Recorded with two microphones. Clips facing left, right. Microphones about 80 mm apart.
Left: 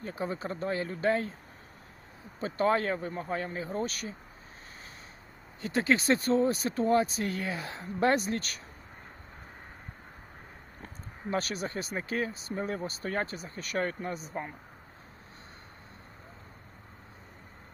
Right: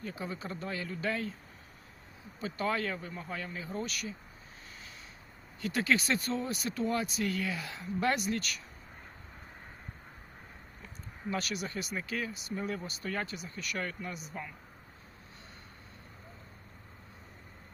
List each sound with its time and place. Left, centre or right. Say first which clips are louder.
0.0 s speech: left 5 dB; left
2.4 s speech: left 6 dB; left
5.6 s speech: left 4 dB; left
10.8 s speech: left 2 dB; left